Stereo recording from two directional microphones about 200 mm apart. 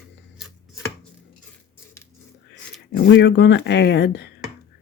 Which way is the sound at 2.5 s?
65° left (ahead or behind).